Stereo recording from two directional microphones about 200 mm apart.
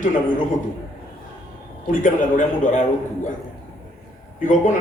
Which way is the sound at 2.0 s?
40° left (ahead or behind).